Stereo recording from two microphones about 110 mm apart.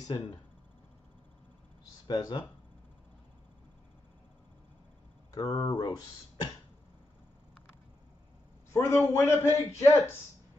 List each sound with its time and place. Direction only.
2.0 s speech: 35° left (ahead or behind)
5.3 s speech: 35° left (ahead or behind)
8.7 s a man's voice: 25° left (ahead or behind)